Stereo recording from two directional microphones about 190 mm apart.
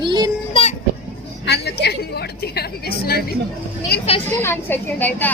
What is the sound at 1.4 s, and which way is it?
Speech, 60° left (ahead or behind).